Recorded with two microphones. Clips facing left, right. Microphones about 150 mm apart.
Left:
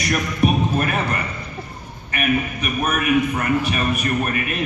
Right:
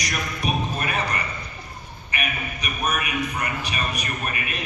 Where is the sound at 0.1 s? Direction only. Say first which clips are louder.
Left 9 dB; 50° left (ahead or behind).